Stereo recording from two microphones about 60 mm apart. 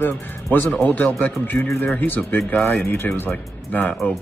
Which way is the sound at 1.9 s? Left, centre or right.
Left.